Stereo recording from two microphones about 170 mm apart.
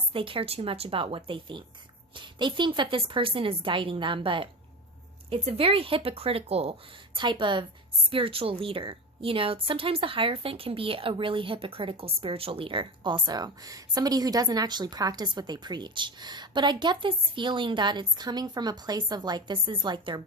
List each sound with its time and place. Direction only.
0.1 s a woman's voice: 30° right (ahead or behind)